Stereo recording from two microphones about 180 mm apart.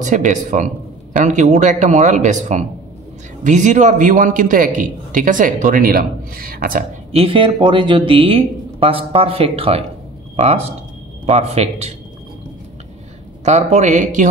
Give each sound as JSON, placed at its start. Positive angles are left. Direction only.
{"t": 0.0, "sound": "a man's voice", "side_deg": -45}
{"t": 7.1, "sound": "speech", "side_deg": -30}
{"t": 13.5, "sound": "speech", "side_deg": -40}